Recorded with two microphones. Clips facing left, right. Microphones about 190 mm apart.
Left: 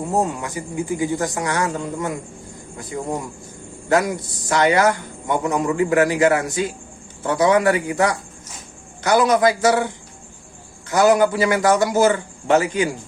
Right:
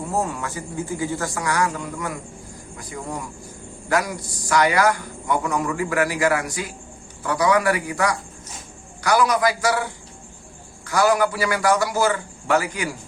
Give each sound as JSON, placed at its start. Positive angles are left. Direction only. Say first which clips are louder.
{"t": 0.1, "sound": "a man's voice", "louder": "left 3 dB", "side_deg": 20}